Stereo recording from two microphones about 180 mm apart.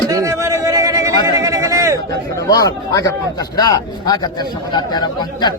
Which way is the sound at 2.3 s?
20° left (ahead or behind).